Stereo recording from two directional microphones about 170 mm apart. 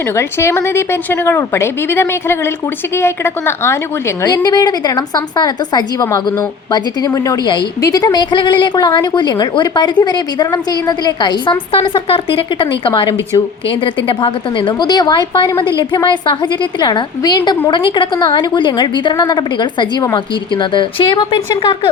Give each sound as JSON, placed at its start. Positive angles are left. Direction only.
{"t": 0.2, "sound": "a woman's voice", "side_deg": 15}